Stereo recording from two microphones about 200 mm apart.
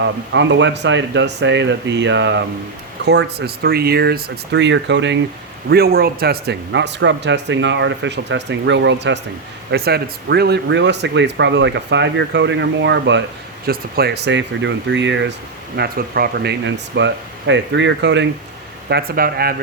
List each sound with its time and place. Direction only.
0.0 s speech: 65° right (ahead or behind)
5.6 s speech: 50° right (ahead or behind)
9.7 s speech: 55° right (ahead or behind)
13.7 s speech: 50° right (ahead or behind)
18.9 s speech: 50° right (ahead or behind)